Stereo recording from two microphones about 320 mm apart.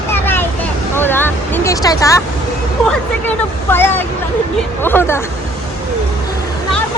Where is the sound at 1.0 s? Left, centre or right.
Centre.